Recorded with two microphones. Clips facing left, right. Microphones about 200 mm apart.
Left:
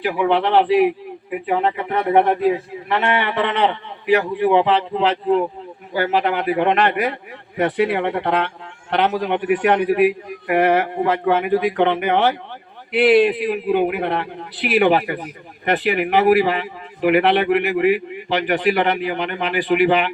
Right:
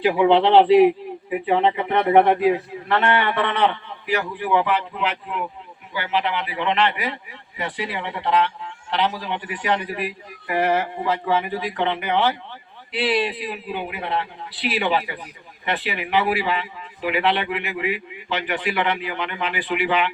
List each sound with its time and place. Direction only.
0.0 s a man's voice: 20° right (ahead or behind)
1.5 s speech: 5° left (ahead or behind)
2.2 s a man's voice: 10° right (ahead or behind)
2.9 s a man's voice: 20° left (ahead or behind); by 17.9 s 55° left (ahead or behind)
18.3 s a man's voice: 40° left (ahead or behind)